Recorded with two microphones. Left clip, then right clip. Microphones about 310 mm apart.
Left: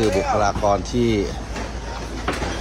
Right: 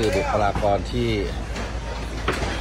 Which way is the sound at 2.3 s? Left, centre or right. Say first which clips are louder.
Even; left.